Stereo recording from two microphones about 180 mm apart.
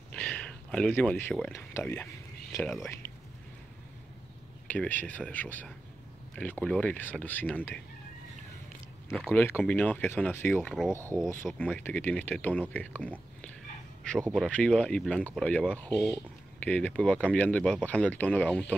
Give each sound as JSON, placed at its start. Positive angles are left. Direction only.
{"t": 0.1, "sound": "a sound", "side_deg": 5}
{"t": 1.5, "sound": "speech", "side_deg": 15}
{"t": 2.5, "sound": "speech", "side_deg": 0}
{"t": 4.6, "sound": "speech", "side_deg": 10}
{"t": 9.3, "sound": "speech", "side_deg": 10}
{"t": 14.3, "sound": "speech", "side_deg": 5}